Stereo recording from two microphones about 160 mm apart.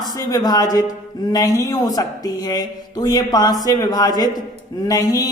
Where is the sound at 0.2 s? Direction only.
25° left (ahead or behind).